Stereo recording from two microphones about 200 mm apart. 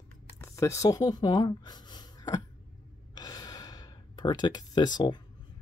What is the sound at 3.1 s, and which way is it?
Gasp, 20° left (ahead or behind).